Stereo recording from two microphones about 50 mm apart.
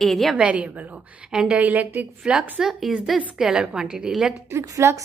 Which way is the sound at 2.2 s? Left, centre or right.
Centre.